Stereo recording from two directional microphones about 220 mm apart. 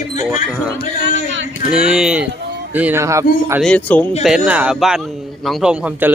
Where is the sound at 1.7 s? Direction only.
5° right (ahead or behind).